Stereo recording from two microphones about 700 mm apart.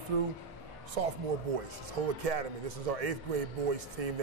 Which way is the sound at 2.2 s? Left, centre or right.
Right.